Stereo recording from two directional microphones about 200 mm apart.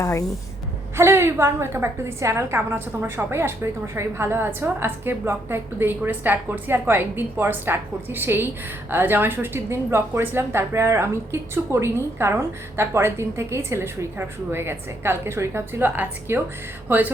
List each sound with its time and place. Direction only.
0.0 s speech: 15° left (ahead or behind)
0.9 s a woman's voice: 15° right (ahead or behind)